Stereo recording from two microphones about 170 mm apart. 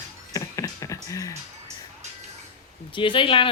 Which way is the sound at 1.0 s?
20° left (ahead or behind).